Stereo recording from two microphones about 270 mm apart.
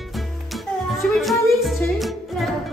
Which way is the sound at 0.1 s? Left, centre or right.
Centre.